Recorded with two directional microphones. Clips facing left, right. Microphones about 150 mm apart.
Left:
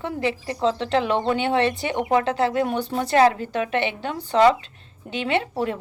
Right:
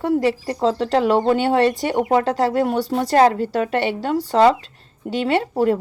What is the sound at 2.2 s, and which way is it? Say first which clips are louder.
Speech: right 3 dB; 40° right (ahead or behind).